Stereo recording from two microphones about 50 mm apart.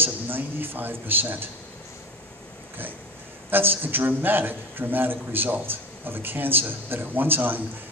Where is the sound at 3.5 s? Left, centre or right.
Right.